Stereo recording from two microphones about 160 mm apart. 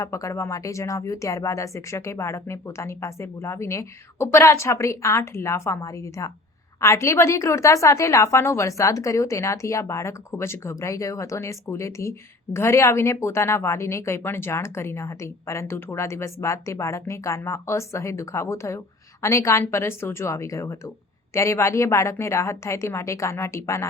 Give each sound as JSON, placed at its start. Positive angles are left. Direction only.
{"t": 0.0, "sound": "speech", "side_deg": 20}